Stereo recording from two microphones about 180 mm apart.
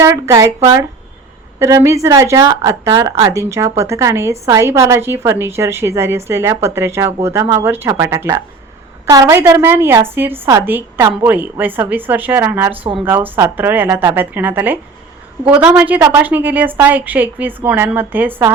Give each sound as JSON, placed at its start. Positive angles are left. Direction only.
{"t": 0.0, "sound": "a woman's voice", "side_deg": -15}
{"t": 12.7, "sound": "speech", "side_deg": -30}
{"t": 13.1, "sound": "a woman's voice", "side_deg": -10}